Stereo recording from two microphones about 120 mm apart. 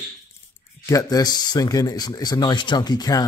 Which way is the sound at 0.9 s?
30° left (ahead or behind).